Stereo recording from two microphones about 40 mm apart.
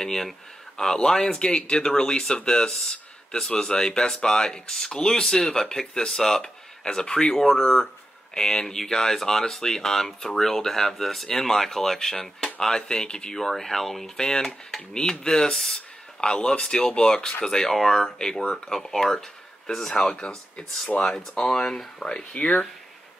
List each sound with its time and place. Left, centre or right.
0.0 s speech: centre
13.4 s speech: centre
16.2 s speech: left
18.0 s speech: centre
20.2 s speech: left
21.0 s speech: centre
22.4 s speech: left